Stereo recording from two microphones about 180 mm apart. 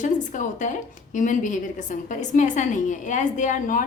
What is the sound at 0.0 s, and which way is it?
A woman's voice, 45° left (ahead or behind).